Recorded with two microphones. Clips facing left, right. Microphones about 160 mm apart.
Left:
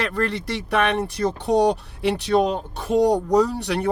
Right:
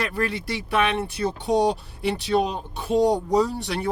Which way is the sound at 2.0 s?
50° left (ahead or behind).